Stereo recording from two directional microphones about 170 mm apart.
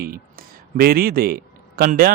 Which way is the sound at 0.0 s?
60° right (ahead or behind).